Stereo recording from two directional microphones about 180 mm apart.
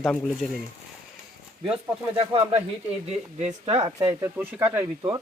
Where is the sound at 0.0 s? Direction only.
5° left (ahead or behind).